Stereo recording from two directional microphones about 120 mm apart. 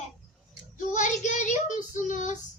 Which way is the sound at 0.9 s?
90° left.